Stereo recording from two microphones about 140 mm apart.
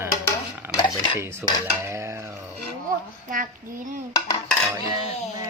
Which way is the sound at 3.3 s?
75° right (ahead or behind).